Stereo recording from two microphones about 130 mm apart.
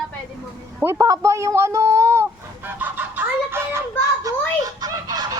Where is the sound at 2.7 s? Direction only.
15° right (ahead or behind).